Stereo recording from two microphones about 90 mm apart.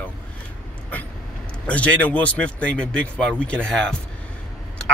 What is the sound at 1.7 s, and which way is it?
A man's voice, 15° left (ahead or behind).